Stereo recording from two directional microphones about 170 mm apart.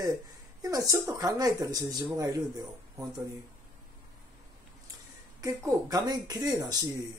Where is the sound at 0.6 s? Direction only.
20° right (ahead or behind).